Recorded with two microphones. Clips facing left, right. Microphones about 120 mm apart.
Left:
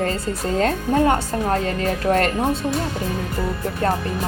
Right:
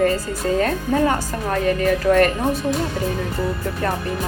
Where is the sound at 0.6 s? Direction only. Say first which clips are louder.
Left 1 dB; 30° left (ahead or behind).